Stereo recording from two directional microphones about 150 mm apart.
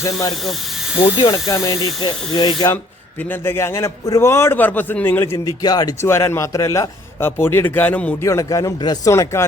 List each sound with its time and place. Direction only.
0.0 s speech: 25° left (ahead or behind)
3.2 s a man's voice: 15° left (ahead or behind)